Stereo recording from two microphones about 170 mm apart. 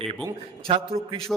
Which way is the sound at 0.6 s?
30° right (ahead or behind).